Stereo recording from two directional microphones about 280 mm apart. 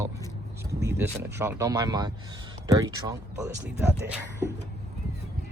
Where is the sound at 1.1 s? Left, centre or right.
Centre.